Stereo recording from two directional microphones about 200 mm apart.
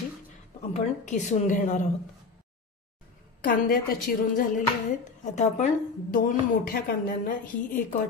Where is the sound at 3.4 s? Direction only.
45° left (ahead or behind).